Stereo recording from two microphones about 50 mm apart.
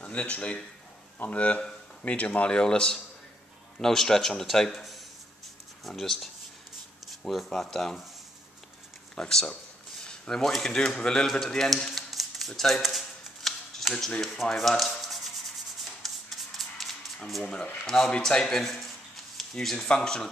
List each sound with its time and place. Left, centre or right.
0.0 s a man's voice: left; by 4.7 s centre
4.7 s a sound: centre
5.9 s speech: centre
7.4 s a man's voice: centre
9.1 s speech: centre
12.8 s shuffling cards: centre
14.2 s rub: centre
17.4 s speech: centre
17.8 s a man's voice: centre